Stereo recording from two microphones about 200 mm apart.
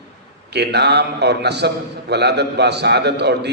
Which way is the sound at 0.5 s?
55° right (ahead or behind).